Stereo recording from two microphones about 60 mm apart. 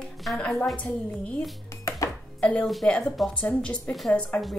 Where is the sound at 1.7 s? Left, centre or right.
Left.